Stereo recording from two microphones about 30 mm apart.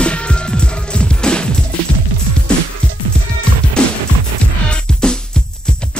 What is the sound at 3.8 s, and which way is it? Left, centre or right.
Music, left.